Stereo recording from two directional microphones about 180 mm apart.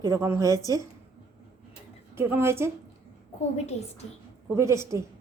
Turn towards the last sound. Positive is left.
turn(degrees=-15)  # may be behind; listen again after turning